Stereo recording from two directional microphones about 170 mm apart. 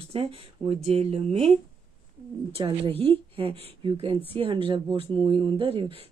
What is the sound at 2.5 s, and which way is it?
Speech, 30° right (ahead or behind).